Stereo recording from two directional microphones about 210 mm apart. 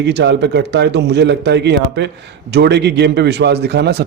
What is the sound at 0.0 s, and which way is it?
A man's voice, 55° right (ahead or behind).